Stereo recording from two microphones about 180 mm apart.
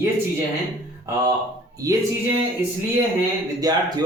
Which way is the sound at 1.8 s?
20° right (ahead or behind).